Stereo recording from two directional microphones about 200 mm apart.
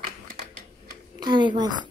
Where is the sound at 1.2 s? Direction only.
20° right (ahead or behind).